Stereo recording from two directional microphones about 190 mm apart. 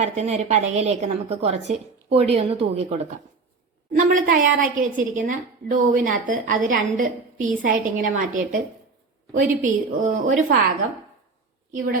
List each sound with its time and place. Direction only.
0.0 s a woman's voice: 35° right (ahead or behind)
3.9 s a woman's voice: 45° right (ahead or behind)
9.6 s a woman's voice: 45° right (ahead or behind)